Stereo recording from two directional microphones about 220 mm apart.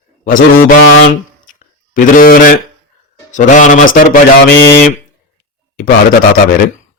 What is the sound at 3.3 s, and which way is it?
A man's voice, 35° left (ahead or behind).